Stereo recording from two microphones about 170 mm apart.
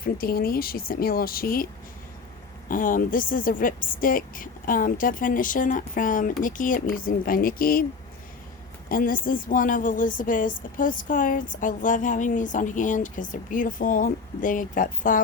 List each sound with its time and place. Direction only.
0.0 s speech: 60° left (ahead or behind)
2.6 s a woman's voice: 50° left (ahead or behind)
8.9 s a woman's voice: 55° left (ahead or behind)